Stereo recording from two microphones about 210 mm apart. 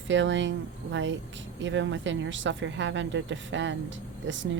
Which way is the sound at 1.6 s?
60° right (ahead or behind).